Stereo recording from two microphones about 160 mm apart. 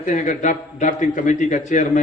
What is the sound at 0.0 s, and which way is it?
A man's voice, 50° left (ahead or behind).